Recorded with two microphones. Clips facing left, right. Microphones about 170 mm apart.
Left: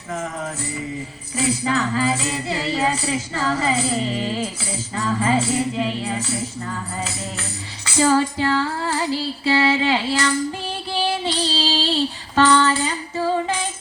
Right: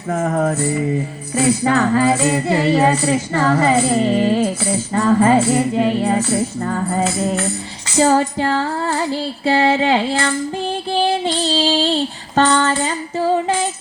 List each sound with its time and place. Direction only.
0.1 s speech: 55° right (ahead or behind)
7.9 s music: 45° right (ahead or behind)
11.0 s female singing: 45° right (ahead or behind)